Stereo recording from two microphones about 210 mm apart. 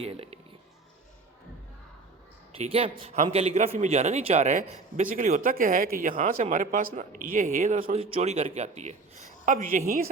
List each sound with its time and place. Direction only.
0.0 s speech: 30° right (ahead or behind)
2.6 s a man's voice: 30° right (ahead or behind)
8.1 s a man's voice: 30° right (ahead or behind)